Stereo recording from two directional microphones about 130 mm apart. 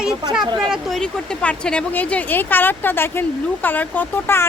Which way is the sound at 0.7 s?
Centre (ahead or behind).